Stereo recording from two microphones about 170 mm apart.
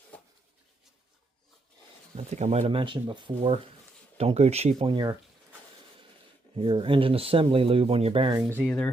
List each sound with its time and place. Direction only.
2.1 s speech: 40° right (ahead or behind)
6.6 s speech: 30° right (ahead or behind)
8.4 s speech: 10° right (ahead or behind)
8.6 s speech: 5° left (ahead or behind)